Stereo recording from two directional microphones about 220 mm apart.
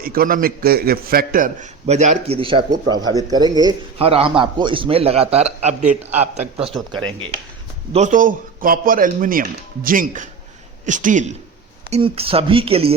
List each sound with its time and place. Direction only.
0.0 s a man's voice: 40° right (ahead or behind)
7.9 s a man's voice: 35° right (ahead or behind)